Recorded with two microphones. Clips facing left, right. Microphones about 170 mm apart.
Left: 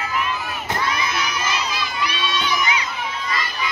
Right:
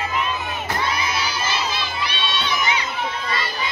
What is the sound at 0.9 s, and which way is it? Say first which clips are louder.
Crowd: even; 30° right (ahead or behind).